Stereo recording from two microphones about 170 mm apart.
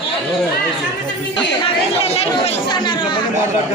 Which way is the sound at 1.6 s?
35° left (ahead or behind).